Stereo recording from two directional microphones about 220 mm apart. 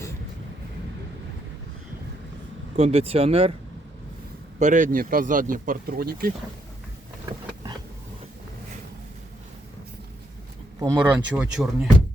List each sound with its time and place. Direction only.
2.7 s speech: 25° right (ahead or behind)
4.6 s speech: 35° right (ahead or behind)
7.3 s a sound: 20° right (ahead or behind)
10.8 s speech: 10° right (ahead or behind)